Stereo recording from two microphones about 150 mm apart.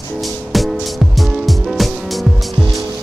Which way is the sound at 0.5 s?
Centre (ahead or behind).